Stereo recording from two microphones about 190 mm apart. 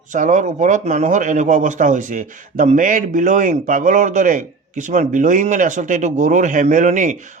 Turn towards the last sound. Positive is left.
turn(degrees=-40)  # may be behind; listen again after turning